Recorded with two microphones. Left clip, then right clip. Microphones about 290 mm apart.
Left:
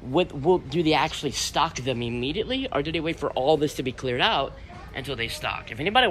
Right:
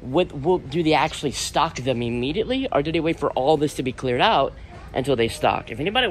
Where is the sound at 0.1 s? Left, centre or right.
Centre.